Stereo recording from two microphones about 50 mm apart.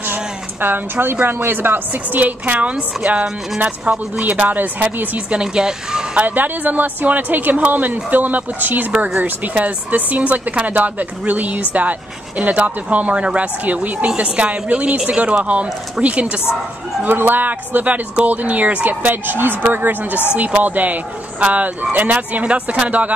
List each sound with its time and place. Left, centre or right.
0.1 s a sound: right
1.2 s speech: right
5.3 s speech: centre
6.1 s speech: right
17.0 s speech: right
20.3 s speech: right